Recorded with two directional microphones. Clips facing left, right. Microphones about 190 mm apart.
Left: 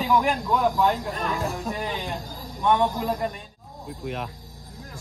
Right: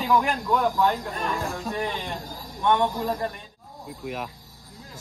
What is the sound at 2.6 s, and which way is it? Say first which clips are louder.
Speech: left 1 dB; 5° left (ahead or behind).